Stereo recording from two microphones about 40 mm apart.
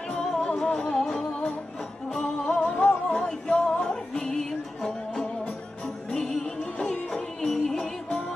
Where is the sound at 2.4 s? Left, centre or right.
Left.